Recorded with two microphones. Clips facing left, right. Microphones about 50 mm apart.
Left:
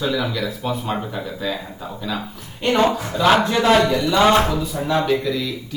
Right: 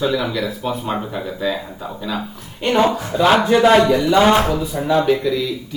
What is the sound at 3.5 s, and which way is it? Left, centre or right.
Speech, centre.